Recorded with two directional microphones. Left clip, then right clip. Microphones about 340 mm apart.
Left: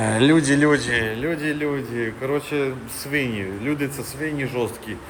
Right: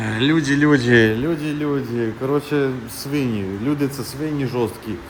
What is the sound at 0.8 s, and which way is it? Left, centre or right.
Speech, right.